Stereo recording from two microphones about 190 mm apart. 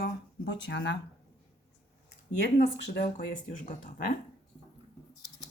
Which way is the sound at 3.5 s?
45° left (ahead or behind).